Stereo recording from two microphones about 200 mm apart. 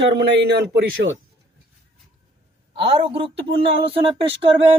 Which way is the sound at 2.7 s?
30° right (ahead or behind).